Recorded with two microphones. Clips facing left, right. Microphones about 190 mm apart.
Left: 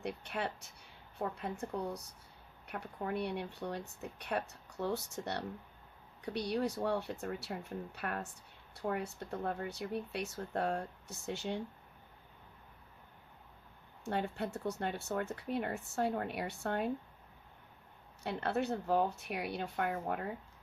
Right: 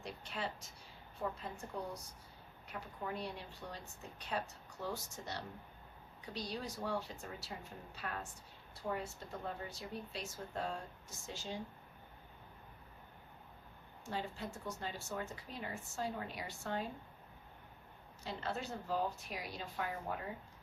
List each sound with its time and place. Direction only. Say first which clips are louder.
0.0 s speech: left 5 dB; 60° left (ahead or behind)
14.0 s speech: left 6 dB; 60° left (ahead or behind)
18.2 s speech: left 7 dB; 60° left (ahead or behind)